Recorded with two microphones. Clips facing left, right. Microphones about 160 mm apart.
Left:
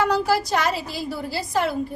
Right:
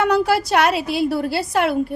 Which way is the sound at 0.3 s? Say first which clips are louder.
Right 4 dB; 70° right (ahead or behind).